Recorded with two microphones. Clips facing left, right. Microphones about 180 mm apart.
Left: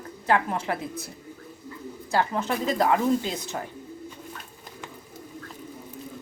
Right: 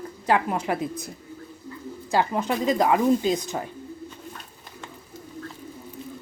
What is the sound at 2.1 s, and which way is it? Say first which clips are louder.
Speech: right 2 dB; 15° right (ahead or behind).